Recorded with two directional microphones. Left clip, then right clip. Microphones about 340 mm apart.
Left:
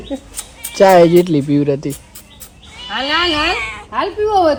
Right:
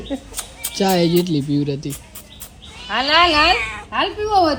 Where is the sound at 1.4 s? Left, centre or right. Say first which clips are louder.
Left 6 dB; left.